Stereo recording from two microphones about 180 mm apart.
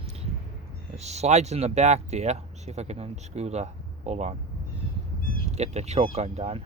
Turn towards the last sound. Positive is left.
turn(degrees=-35)  # may be behind; listen again after turning